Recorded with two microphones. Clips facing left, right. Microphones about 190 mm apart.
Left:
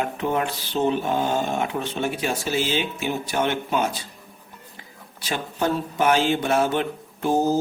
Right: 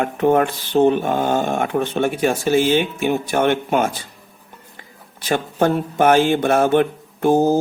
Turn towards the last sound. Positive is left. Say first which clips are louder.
# right 6 dB
turn(degrees=-55)  # may be behind; listen again after turning